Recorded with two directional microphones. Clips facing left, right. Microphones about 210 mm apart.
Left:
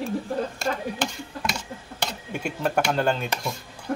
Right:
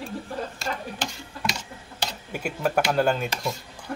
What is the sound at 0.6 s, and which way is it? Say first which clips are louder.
Speech: left 4 dB; 55° left (ahead or behind).